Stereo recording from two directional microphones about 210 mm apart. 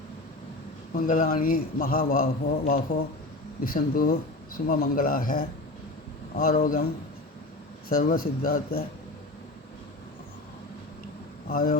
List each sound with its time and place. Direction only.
0.9 s a man's voice: 40° left (ahead or behind)
7.9 s speech: 40° left (ahead or behind)
11.4 s speech: 40° left (ahead or behind)